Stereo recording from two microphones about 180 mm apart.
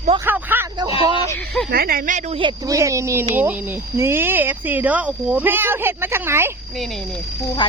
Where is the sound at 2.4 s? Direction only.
25° right (ahead or behind).